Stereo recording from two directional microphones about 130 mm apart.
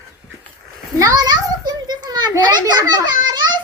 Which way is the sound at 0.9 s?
25° right (ahead or behind).